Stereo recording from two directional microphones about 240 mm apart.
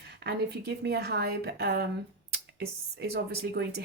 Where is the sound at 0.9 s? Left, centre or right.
Right.